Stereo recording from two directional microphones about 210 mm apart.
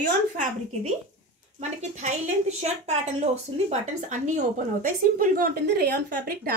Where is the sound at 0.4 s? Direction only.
35° right (ahead or behind).